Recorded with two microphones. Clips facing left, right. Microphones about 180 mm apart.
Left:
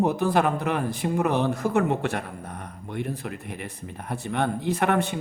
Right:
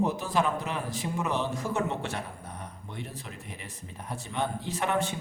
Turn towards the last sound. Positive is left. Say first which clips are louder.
# left 6 dB
turn(degrees=60)  # may be behind; listen again after turning